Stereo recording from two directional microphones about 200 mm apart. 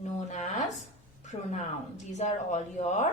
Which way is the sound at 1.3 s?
35° left (ahead or behind).